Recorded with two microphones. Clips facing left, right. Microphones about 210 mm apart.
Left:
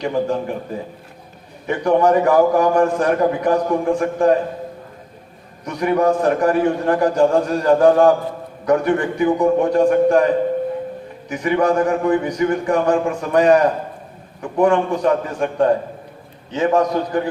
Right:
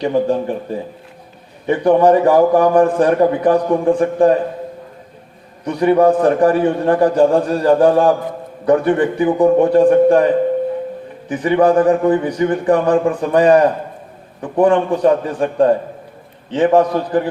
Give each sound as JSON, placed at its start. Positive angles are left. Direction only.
{"t": 0.0, "sound": "a man's voice", "side_deg": -35}
{"t": 1.6, "sound": "a man's voice", "side_deg": -35}
{"t": 5.6, "sound": "a man's voice", "side_deg": -30}
{"t": 11.3, "sound": "a man's voice", "side_deg": -35}
{"t": 14.6, "sound": "a man's voice", "side_deg": -35}